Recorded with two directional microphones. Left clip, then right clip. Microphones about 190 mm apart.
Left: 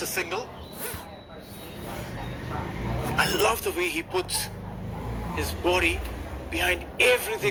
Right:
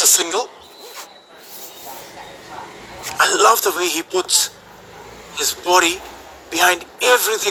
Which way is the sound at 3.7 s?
15° right (ahead or behind).